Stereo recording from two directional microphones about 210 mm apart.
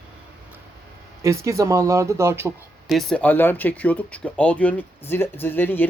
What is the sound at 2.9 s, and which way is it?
Speech, centre (ahead or behind).